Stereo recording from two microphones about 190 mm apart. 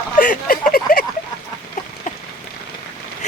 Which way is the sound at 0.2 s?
45° left (ahead or behind).